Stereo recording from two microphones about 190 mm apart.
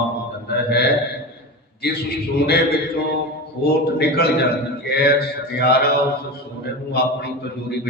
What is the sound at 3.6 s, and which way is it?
Mantra, 55° left (ahead or behind).